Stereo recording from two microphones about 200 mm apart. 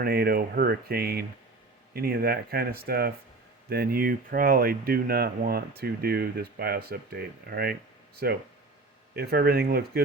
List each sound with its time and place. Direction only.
0.0 s speech: 50° right (ahead or behind)